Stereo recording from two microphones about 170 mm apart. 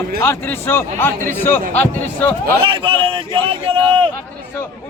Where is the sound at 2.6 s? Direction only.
30° right (ahead or behind).